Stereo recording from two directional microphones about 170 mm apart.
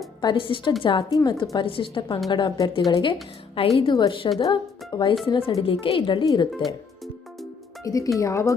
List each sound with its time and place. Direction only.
0.2 s a woman's voice: 30° left (ahead or behind)
7.9 s a woman's voice: 20° left (ahead or behind)